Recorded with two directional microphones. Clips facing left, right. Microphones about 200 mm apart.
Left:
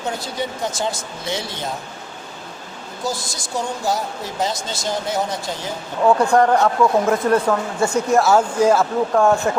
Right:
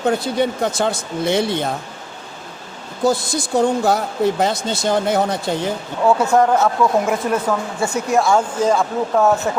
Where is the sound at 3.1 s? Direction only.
60° right (ahead or behind).